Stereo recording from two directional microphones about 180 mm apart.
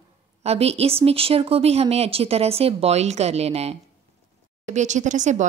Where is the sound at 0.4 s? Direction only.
35° right (ahead or behind).